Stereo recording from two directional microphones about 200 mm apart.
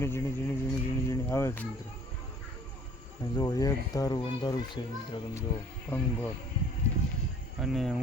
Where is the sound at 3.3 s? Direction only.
20° left (ahead or behind).